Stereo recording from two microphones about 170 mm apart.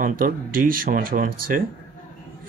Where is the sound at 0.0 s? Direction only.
55° right (ahead or behind).